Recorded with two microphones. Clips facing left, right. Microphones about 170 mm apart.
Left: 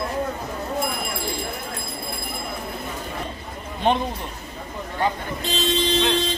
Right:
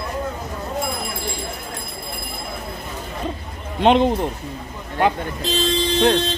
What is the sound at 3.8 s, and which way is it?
Speech, 75° right (ahead or behind).